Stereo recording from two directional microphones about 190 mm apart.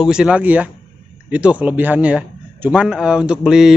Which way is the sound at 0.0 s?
5° right (ahead or behind).